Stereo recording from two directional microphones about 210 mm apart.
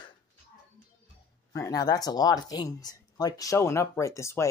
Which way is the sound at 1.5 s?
15° left (ahead or behind).